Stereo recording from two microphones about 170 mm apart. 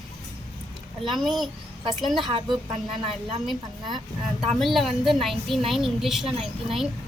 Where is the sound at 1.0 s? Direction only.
Centre (ahead or behind).